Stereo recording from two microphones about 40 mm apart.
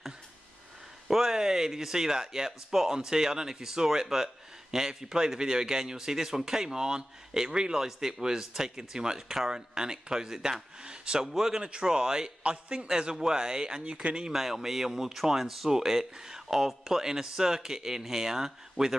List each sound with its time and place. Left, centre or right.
1.0 s speech: centre
10.8 s speech: right
11.2 s speech: centre
12.4 s speech: right
12.8 s speech: centre
14.3 s speech: centre